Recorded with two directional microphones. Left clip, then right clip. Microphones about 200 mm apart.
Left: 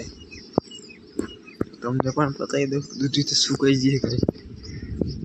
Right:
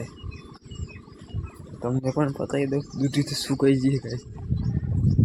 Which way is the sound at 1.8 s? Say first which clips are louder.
Left 2 dB; centre (ahead or behind).